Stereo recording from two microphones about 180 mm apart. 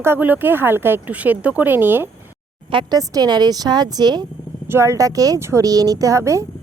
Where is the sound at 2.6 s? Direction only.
25° right (ahead or behind).